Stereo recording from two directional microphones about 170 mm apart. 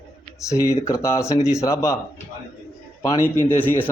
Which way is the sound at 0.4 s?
20° left (ahead or behind).